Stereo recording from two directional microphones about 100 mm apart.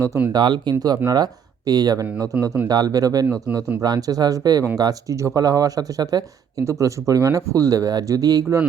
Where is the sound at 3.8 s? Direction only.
40° right (ahead or behind).